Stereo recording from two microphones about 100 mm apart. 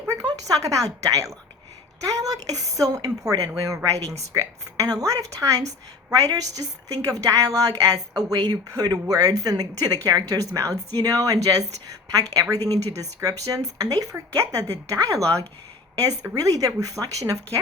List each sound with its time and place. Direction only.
0.1 s a woman's voice: 35° right (ahead or behind)
3.9 s speech: 90° right
4.3 s a woman's voice: 35° right (ahead or behind)